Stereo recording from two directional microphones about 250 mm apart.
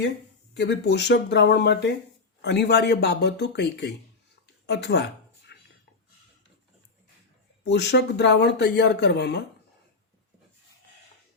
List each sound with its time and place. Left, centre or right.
0.5 s speech: left
4.4 s a sound: left
7.6 s speech: left